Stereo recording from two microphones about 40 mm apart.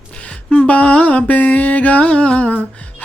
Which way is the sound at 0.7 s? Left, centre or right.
Left.